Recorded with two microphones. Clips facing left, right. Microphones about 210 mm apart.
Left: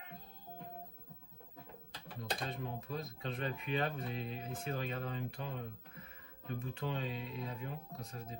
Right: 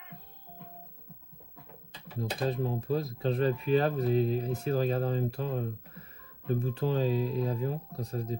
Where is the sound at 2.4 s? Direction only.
35° right (ahead or behind).